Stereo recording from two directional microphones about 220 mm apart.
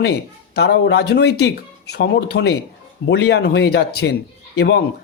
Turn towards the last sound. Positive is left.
turn(degrees=50)  # may be behind; listen again after turning